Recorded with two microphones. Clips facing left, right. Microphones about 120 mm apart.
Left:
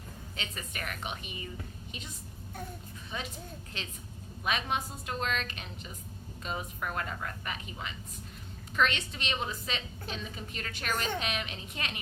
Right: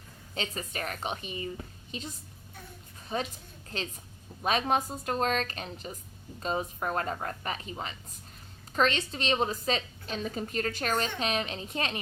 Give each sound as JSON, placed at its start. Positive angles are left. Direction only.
{"t": 0.3, "sound": "a woman's voice", "side_deg": -35}
{"t": 3.1, "sound": "a woman's voice", "side_deg": -40}
{"t": 4.4, "sound": "a woman's voice", "side_deg": -40}